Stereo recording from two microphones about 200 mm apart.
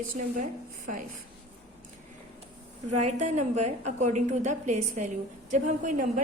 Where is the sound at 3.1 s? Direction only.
35° right (ahead or behind).